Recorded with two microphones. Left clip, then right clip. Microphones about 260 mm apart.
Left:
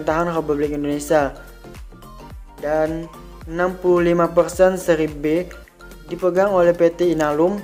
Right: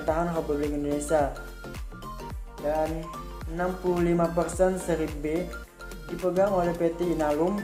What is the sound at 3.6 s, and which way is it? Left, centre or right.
Speech, left.